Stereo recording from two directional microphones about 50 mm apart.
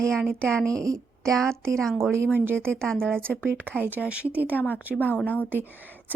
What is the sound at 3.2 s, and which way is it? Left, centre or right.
Speech, right.